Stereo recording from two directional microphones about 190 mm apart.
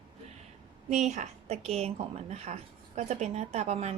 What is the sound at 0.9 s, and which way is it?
A woman's voice, 35° right (ahead or behind).